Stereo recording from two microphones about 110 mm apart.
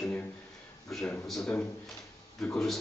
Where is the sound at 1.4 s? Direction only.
15° left (ahead or behind).